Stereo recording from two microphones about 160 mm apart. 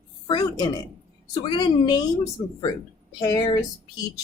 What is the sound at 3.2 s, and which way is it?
Speech, 25° left (ahead or behind).